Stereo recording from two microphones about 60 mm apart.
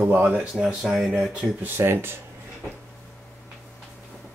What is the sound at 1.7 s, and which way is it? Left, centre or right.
Speech, right.